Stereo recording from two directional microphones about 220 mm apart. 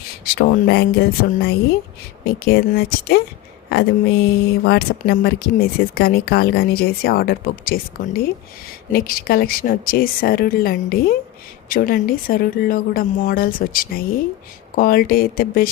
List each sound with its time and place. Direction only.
0.3 s speech: 45° left (ahead or behind)